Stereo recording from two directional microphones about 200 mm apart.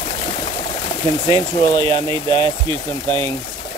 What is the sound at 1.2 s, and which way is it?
Speech, 20° left (ahead or behind).